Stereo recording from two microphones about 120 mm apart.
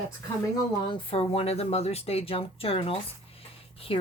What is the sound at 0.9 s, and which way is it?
Speech, 50° left (ahead or behind).